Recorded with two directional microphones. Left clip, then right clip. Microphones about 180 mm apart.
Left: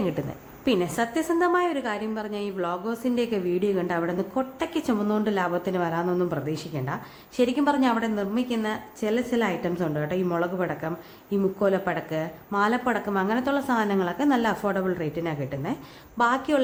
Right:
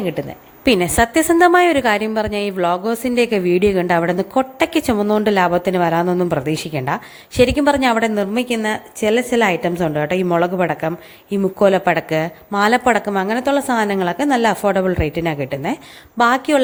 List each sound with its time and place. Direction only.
0.0 s a woman's voice: 20° right (ahead or behind)
0.6 s a woman's voice: 35° right (ahead or behind)